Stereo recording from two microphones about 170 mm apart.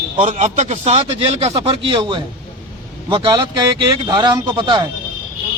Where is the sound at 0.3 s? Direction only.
45° right (ahead or behind); by 4.9 s 25° right (ahead or behind).